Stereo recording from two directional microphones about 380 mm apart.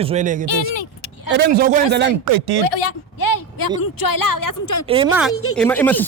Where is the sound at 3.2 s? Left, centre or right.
Left.